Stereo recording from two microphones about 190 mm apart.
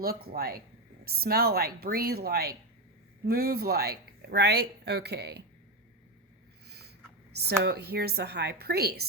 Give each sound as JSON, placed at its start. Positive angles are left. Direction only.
{"t": 0.0, "sound": "speech", "side_deg": -50}
{"t": 6.7, "sound": "a sound", "side_deg": -60}
{"t": 7.3, "sound": "speech", "side_deg": -60}